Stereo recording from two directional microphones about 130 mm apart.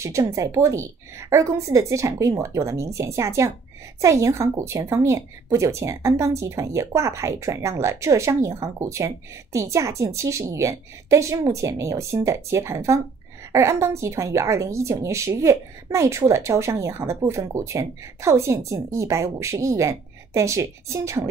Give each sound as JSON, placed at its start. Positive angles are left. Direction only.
{"t": 0.0, "sound": "a woman's voice", "side_deg": -25}